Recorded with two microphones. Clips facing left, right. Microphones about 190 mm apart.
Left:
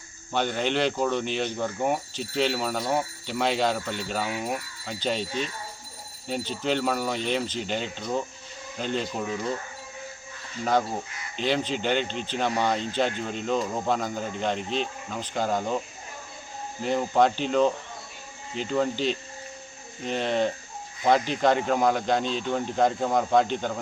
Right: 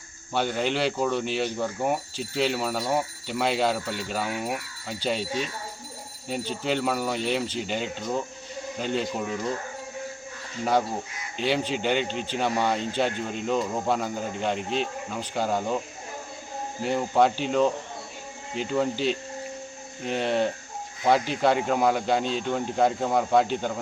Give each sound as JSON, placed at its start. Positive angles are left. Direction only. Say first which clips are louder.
{"t": 0.3, "sound": "speech", "louder": "even", "side_deg": -5}
{"t": 10.6, "sound": "speech", "louder": "even", "side_deg": -10}
{"t": 16.8, "sound": "speech", "louder": "even", "side_deg": -10}
{"t": 18.7, "sound": "speech", "louder": "even", "side_deg": -5}